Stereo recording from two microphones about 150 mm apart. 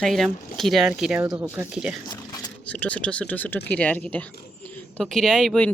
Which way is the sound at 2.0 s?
25° left (ahead or behind).